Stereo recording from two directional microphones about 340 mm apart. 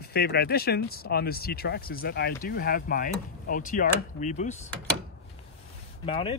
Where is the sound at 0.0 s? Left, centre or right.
Left.